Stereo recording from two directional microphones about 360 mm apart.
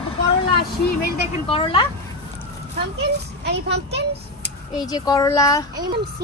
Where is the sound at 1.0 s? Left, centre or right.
Centre.